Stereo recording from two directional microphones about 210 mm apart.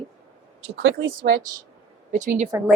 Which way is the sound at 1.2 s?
45° right (ahead or behind).